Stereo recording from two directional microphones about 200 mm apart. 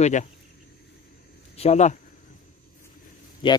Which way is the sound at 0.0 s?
35° left (ahead or behind).